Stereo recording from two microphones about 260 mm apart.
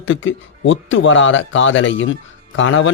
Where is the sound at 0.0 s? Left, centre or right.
Left.